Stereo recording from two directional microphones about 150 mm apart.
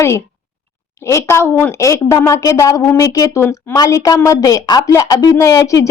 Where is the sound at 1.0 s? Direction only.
20° left (ahead or behind).